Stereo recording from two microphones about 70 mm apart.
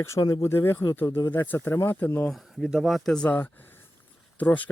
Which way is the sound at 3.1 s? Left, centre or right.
Centre.